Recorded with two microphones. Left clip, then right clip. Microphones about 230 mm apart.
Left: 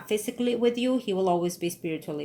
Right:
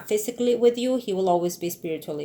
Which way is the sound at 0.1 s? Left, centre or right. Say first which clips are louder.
Right 4 dB; left.